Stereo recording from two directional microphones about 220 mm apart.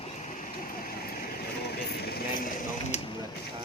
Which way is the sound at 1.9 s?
45° left (ahead or behind).